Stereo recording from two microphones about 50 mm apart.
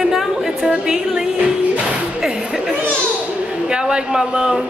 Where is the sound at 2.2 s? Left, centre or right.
Centre.